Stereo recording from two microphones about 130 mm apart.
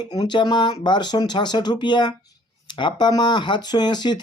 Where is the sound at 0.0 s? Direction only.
30° left (ahead or behind).